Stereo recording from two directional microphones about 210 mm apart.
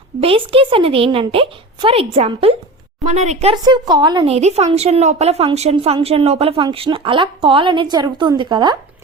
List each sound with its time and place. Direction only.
0.2 s a woman's voice: 25° right (ahead or behind)
3.5 s a woman's voice: 20° right (ahead or behind)
4.4 s a woman's voice: 30° right (ahead or behind)